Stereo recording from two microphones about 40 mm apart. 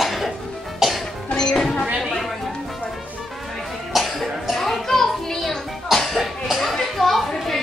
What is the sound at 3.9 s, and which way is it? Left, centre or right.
Music, centre.